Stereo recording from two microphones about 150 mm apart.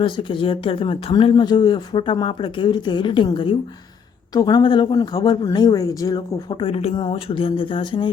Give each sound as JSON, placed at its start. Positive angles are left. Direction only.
{"t": 0.0, "sound": "speech", "side_deg": 35}
{"t": 6.1, "sound": "speech", "side_deg": 35}